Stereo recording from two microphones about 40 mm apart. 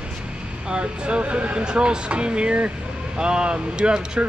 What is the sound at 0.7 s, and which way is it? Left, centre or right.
Speech, right.